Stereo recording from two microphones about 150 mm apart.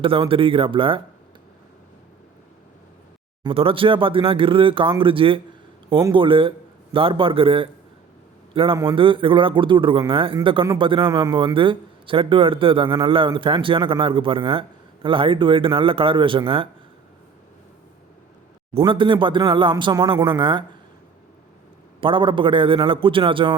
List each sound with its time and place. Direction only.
0.0 s a man's voice: 35° right (ahead or behind)
3.4 s a man's voice: 40° right (ahead or behind)
18.9 s a man's voice: 35° right (ahead or behind)
22.0 s a man's voice: 35° right (ahead or behind)